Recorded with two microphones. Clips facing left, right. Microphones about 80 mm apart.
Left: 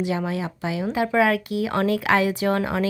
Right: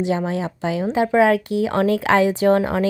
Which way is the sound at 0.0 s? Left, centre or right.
Right.